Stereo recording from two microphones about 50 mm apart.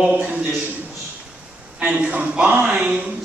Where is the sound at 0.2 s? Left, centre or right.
Right.